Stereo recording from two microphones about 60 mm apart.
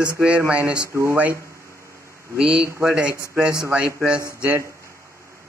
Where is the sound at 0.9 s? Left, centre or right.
Right.